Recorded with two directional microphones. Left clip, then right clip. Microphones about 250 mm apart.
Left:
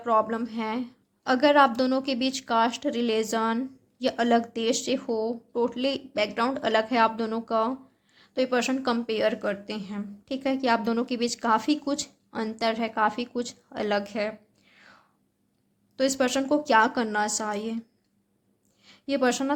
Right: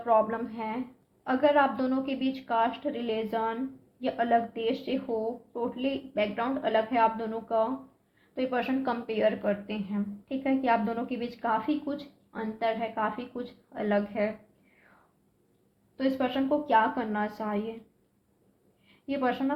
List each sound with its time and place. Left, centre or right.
0.0 s speech: left
16.0 s speech: left
19.0 s speech: left